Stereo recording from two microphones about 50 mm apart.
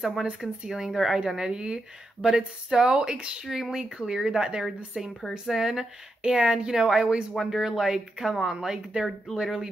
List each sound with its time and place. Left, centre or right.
0.2 s speech: centre
7.4 s speech: centre